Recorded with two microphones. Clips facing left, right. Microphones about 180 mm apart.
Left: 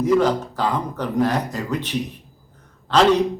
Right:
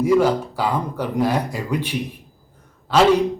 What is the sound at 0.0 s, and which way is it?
A man's voice, 10° right (ahead or behind).